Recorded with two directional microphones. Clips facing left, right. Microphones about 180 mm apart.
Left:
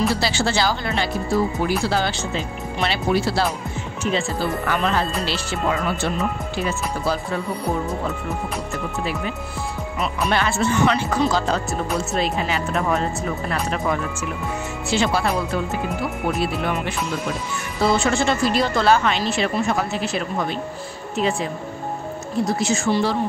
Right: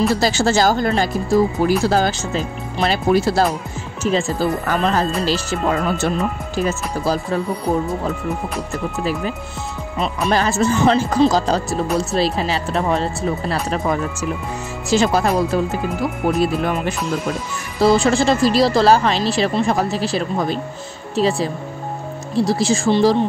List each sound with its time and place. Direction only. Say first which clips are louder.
0.1 s speech: right 5 dB; 45° right (ahead or behind)
9.9 s speech: right 4 dB; 35° right (ahead or behind)